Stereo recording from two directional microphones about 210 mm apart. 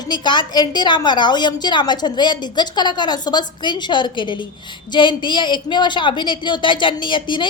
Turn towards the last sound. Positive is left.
turn(degrees=20)  # may be behind; listen again after turning